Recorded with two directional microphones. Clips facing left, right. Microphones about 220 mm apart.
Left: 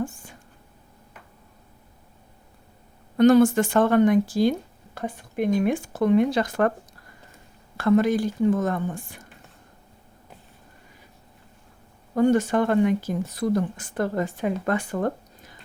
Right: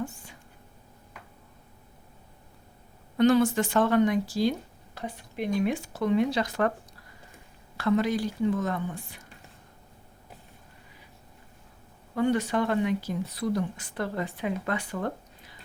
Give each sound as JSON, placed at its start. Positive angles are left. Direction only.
{"t": 0.0, "sound": "a sound", "side_deg": 50}
{"t": 3.2, "sound": "speech", "side_deg": 45}
{"t": 7.8, "sound": "speech", "side_deg": 50}
{"t": 12.1, "sound": "speech", "side_deg": 45}